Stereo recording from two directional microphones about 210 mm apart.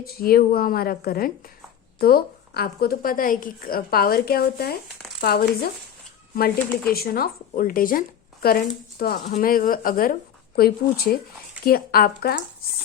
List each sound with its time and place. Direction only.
0.0 s speech: 45° left (ahead or behind)
6.9 s speech: 45° left (ahead or behind)